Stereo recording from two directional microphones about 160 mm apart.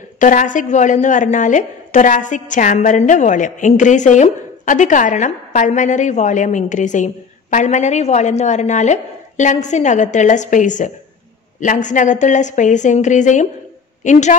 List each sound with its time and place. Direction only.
0.2 s a woman's voice: 50° left (ahead or behind)